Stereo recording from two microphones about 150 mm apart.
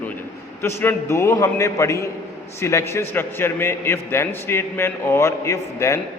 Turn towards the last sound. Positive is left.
turn(degrees=20)  # may be behind; listen again after turning